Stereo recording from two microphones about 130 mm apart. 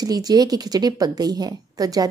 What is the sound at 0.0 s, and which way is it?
A woman's voice, 30° right (ahead or behind).